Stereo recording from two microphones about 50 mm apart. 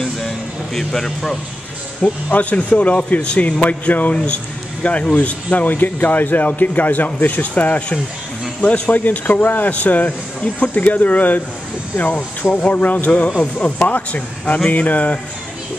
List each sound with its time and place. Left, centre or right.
0.7 s a man's voice: centre
2.0 s speech: left
12.6 s speech: left